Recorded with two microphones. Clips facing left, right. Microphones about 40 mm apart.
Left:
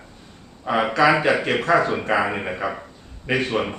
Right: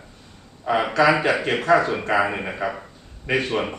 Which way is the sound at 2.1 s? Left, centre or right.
Centre.